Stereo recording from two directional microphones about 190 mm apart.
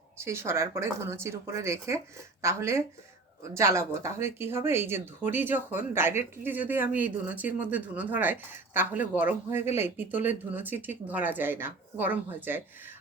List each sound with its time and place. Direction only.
0.2 s speech: 15° right (ahead or behind)